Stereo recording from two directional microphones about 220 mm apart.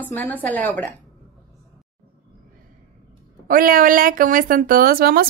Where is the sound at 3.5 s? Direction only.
40° right (ahead or behind).